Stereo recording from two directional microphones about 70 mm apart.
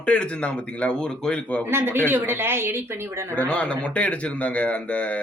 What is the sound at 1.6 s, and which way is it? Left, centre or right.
Speech, right.